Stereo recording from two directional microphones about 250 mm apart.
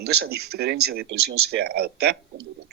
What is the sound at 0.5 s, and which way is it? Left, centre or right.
Speech, right.